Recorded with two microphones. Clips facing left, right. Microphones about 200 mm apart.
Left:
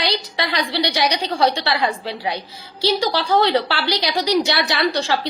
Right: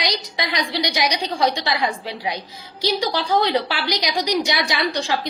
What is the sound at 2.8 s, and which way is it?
A woman's voice, 15° right (ahead or behind).